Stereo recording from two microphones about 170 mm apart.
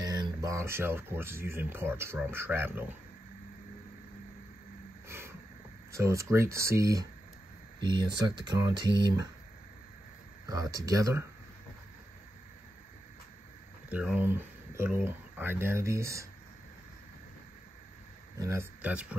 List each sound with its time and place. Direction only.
0.0 s speech: 25° right (ahead or behind)
5.0 s a sound: 15° right (ahead or behind)
5.9 s speech: 15° right (ahead or behind)
10.4 s speech: 20° right (ahead or behind)
13.8 s speech: 10° right (ahead or behind)
18.4 s speech: 15° right (ahead or behind)